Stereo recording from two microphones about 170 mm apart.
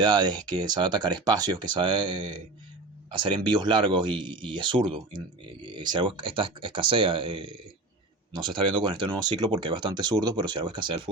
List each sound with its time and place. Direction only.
0.0 s speech: 25° right (ahead or behind)